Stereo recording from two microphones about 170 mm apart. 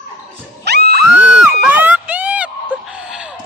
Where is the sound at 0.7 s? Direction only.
75° right (ahead or behind).